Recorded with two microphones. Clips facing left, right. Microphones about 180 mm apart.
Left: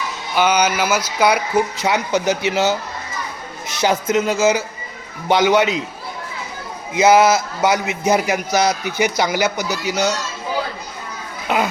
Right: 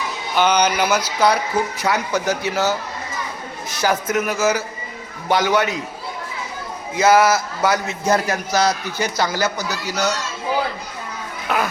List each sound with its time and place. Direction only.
0.3 s music: 10° left (ahead or behind)
1.8 s a man's voice: 20° left (ahead or behind)
6.9 s a man's voice: 20° left (ahead or behind)
11.4 s speech: 20° left (ahead or behind)